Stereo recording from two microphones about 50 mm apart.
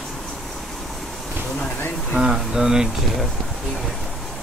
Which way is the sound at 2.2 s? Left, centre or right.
Centre.